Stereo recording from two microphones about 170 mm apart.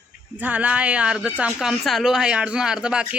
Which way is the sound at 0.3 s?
10° right (ahead or behind).